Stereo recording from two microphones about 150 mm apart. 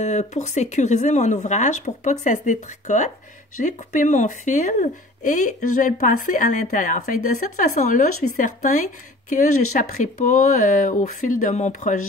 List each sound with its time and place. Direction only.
0.0 s speech: 50° left (ahead or behind)